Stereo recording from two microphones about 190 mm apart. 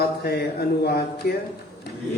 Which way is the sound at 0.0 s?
55° left (ahead or behind).